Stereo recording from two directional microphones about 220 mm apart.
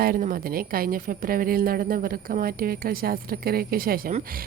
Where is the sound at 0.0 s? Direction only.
40° right (ahead or behind).